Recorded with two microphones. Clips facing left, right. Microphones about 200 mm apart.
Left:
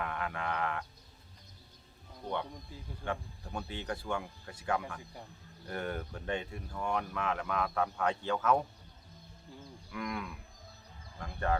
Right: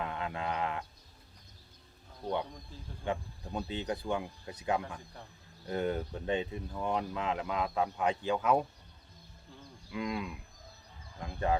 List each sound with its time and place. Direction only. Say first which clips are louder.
0.0 s speech: right 1 dB; 20° right (ahead or behind)
2.2 s speech: right 3 dB; 15° right (ahead or behind)
9.9 s speech: right 3 dB; 20° right (ahead or behind)